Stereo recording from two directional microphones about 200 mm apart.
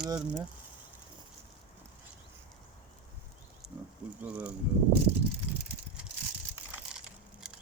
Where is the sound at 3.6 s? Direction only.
30° left (ahead or behind).